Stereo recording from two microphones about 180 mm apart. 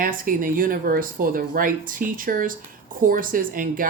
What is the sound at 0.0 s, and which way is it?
Speech, 50° right (ahead or behind).